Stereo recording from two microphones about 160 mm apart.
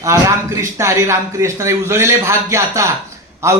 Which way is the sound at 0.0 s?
20° right (ahead or behind).